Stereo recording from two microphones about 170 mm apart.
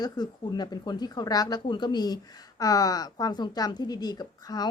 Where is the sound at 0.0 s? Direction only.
25° left (ahead or behind).